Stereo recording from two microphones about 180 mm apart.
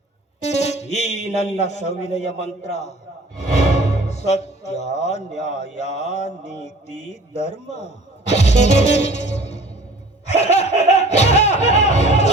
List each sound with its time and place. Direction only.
0.4 s speech: 40° left (ahead or behind)
10.2 s music: 40° left (ahead or behind)